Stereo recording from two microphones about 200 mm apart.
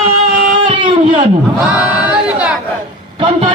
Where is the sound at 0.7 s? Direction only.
25° right (ahead or behind).